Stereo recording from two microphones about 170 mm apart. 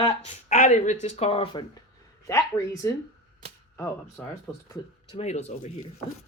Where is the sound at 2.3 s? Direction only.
20° left (ahead or behind).